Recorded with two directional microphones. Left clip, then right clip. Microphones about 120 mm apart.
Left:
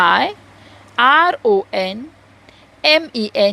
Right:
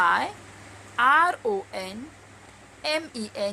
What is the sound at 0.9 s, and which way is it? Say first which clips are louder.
Speech: left 8 dB; 45° left (ahead or behind).